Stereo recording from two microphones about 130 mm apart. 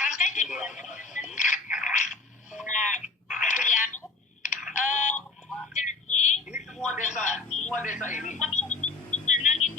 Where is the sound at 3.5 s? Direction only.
65° left (ahead or behind).